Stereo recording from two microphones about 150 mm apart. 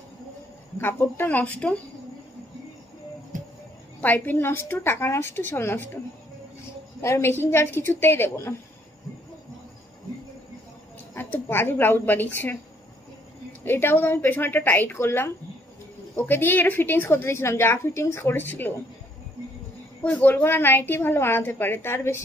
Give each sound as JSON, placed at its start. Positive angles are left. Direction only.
{"t": 0.7, "sound": "a woman's voice", "side_deg": 15}
{"t": 4.0, "sound": "a woman's voice", "side_deg": 10}
{"t": 7.0, "sound": "a woman's voice", "side_deg": 15}
{"t": 11.1, "sound": "a woman's voice", "side_deg": 15}
{"t": 20.0, "sound": "a woman's voice", "side_deg": 10}